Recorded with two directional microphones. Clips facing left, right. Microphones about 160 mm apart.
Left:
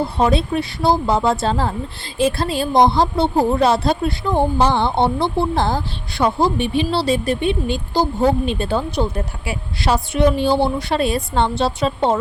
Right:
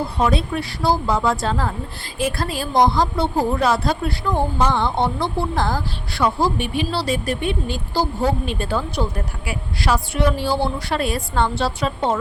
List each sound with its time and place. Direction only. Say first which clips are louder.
0.2 s speech: left 3 dB; 25° left (ahead or behind)